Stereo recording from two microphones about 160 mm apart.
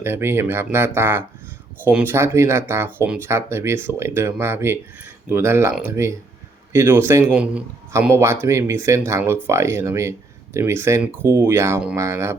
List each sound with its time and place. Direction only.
0.0 s a man's voice: 15° right (ahead or behind)